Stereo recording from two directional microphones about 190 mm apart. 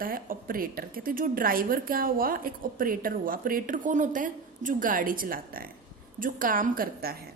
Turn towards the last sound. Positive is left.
turn(degrees=-50)  # may be behind; listen again after turning